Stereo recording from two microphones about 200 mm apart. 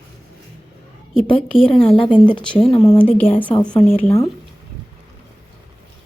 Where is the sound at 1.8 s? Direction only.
25° left (ahead or behind).